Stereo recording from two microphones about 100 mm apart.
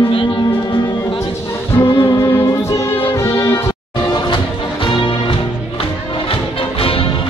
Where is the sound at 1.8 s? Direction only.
35° left (ahead or behind).